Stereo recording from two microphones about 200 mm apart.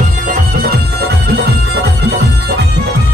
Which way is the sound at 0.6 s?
55° right (ahead or behind).